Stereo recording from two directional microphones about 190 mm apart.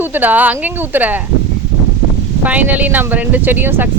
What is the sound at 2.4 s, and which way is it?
Speech, 10° right (ahead or behind).